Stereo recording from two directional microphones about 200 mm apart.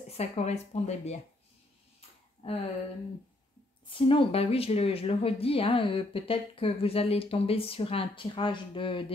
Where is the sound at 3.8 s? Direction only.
25° left (ahead or behind).